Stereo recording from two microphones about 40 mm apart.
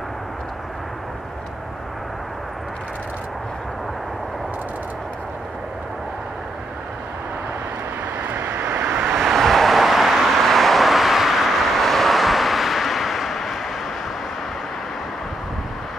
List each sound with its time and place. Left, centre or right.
8.2 s vehicle: right
9.1 s vehicle: centre